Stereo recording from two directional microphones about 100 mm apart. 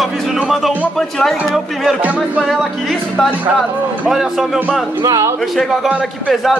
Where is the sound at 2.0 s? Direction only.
15° right (ahead or behind).